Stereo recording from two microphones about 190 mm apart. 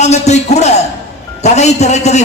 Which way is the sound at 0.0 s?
35° left (ahead or behind).